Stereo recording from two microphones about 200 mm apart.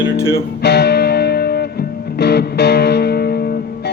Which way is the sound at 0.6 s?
55° left (ahead or behind).